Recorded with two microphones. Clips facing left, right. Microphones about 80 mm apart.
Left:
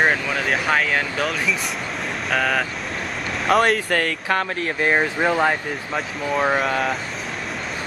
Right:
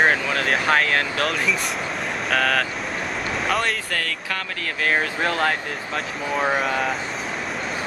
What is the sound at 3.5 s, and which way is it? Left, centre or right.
Speech, left.